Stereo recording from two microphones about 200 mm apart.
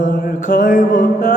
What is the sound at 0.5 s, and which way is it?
Mantra, 45° left (ahead or behind).